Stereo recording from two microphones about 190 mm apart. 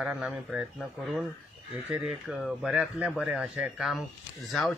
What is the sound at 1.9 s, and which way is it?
Speech, centre (ahead or behind).